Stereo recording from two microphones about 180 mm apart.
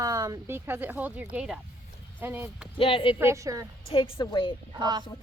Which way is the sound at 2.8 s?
30° left (ahead or behind).